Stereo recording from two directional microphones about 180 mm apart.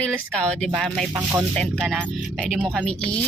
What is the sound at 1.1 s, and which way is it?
Speech, 15° right (ahead or behind).